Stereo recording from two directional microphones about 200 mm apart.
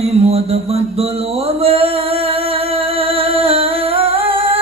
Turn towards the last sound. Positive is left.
turn(degrees=-25)  # may be behind; listen again after turning